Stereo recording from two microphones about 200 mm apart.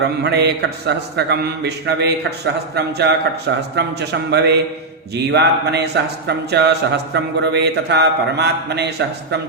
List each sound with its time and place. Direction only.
0.2 s speech: 55° right (ahead or behind)